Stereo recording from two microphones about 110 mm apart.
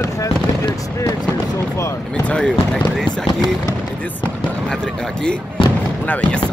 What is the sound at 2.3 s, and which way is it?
Speech, 10° left (ahead or behind).